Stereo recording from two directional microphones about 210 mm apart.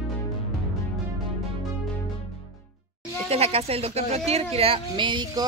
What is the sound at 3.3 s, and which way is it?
A woman's voice, 30° right (ahead or behind).